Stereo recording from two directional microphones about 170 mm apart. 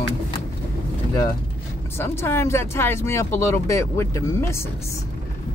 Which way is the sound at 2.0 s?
15° left (ahead or behind).